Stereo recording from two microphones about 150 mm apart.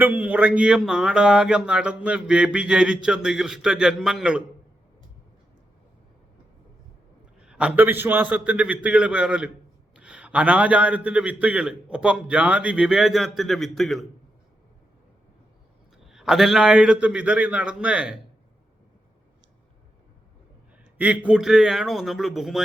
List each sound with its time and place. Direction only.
0.0 s speech: 10° right (ahead or behind)
7.4 s a man's voice: 5° right (ahead or behind)
16.0 s a man's voice: centre (ahead or behind)
21.0 s speech: 10° right (ahead or behind)